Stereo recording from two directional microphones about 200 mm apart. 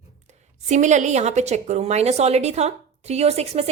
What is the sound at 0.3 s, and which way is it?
A woman's voice, 35° right (ahead or behind).